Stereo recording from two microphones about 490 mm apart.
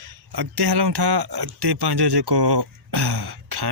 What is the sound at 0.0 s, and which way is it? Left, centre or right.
Speech, right.